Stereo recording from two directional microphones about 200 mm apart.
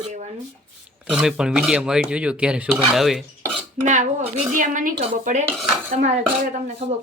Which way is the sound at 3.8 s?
35° right (ahead or behind).